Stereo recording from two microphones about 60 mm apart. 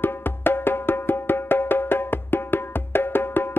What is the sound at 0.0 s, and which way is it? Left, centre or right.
Music, left.